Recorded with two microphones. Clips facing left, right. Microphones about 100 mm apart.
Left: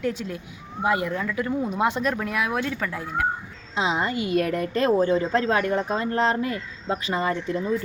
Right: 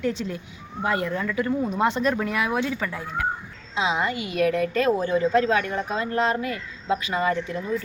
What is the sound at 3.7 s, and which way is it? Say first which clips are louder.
Speech: even; 35° left (ahead or behind).